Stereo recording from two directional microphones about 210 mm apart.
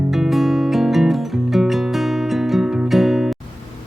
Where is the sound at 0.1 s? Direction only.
Centre (ahead or behind).